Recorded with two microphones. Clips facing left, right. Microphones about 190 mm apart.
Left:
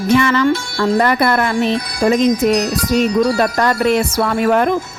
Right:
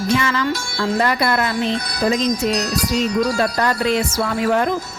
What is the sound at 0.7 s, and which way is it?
Speech, 50° left (ahead or behind).